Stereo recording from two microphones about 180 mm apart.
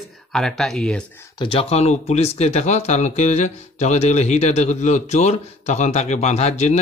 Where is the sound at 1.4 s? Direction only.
30° left (ahead or behind).